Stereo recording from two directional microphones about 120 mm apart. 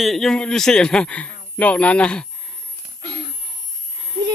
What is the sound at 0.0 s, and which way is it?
Speech, centre (ahead or behind).